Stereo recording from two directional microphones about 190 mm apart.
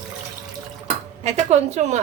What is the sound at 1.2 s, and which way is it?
Speech, 35° right (ahead or behind).